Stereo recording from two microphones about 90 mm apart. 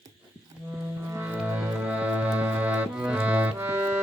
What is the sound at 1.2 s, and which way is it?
Music, 20° right (ahead or behind).